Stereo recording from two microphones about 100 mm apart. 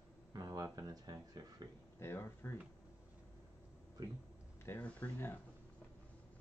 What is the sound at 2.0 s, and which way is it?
Speech, 25° left (ahead or behind).